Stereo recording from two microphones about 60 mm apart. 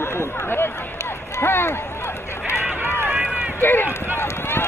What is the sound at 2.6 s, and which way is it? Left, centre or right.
Run, right.